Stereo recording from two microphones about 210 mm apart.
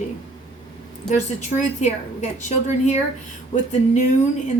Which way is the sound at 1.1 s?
35° left (ahead or behind).